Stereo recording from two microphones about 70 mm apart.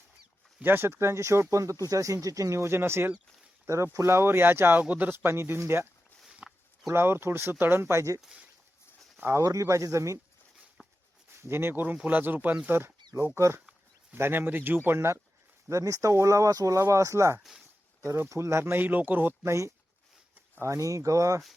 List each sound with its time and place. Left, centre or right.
0.6 s speech: right
6.2 s pig: centre
6.9 s speech: right
9.3 s speech: right
10.8 s a sound: centre
11.3 s speech: right
17.4 s speech: centre
18.0 s speech: right
19.4 s speech: right